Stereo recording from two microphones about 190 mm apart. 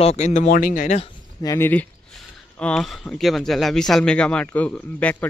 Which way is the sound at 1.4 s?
15° left (ahead or behind).